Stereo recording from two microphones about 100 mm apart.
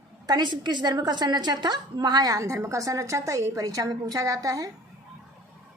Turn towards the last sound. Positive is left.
turn(degrees=-35)  # may be behind; listen again after turning